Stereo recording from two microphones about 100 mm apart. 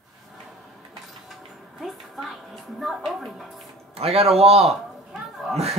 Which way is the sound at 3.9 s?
80° right.